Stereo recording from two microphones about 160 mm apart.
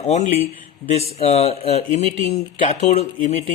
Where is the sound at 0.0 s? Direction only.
45° left (ahead or behind).